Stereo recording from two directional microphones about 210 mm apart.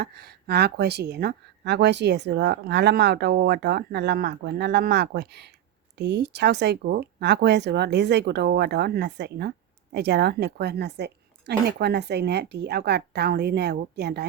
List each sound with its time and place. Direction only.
0.0 s speech: 50° right (ahead or behind)